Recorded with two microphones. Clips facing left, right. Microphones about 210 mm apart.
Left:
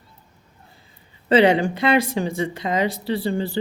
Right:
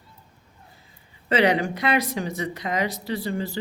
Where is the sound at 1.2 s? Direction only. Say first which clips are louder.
Left 5 dB; 30° left (ahead or behind).